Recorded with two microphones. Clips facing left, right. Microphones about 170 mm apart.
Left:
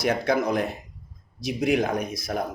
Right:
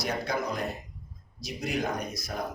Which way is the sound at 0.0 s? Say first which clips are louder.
Left 8 dB; 90° left.